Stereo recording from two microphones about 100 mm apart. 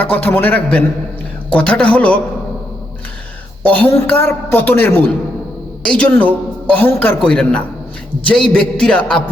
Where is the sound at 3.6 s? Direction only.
15° left (ahead or behind).